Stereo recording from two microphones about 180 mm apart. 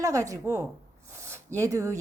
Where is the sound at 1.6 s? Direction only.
15° right (ahead or behind).